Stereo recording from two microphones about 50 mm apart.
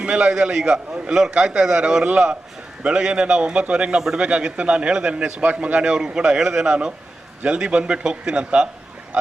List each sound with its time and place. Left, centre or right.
0.0 s a man's voice: centre
4.3 s a man's voice: right